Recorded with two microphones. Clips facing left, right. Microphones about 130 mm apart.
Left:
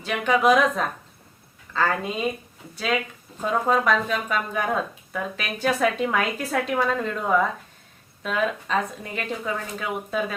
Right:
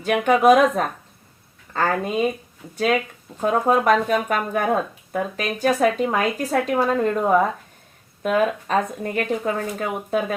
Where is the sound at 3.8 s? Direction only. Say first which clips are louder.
Right 5 dB; 50° right (ahead or behind).